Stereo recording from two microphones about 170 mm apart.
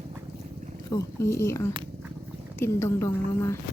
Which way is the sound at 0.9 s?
15° left (ahead or behind).